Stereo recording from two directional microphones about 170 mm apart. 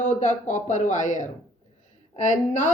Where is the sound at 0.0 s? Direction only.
45° left (ahead or behind).